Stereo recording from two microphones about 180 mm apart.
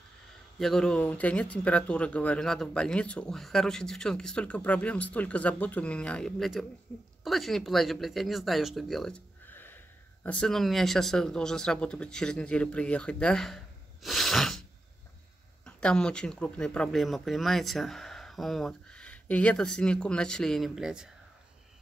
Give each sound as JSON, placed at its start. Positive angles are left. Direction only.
{"t": 0.6, "sound": "speech", "side_deg": 5}
{"t": 14.0, "sound": "sneeze", "side_deg": 0}
{"t": 15.6, "sound": "speech", "side_deg": 5}